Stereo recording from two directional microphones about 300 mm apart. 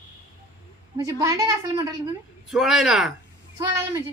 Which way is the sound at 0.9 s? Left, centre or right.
Centre.